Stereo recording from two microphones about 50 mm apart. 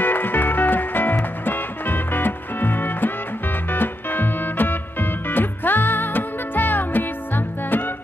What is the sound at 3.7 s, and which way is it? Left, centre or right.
Music, left.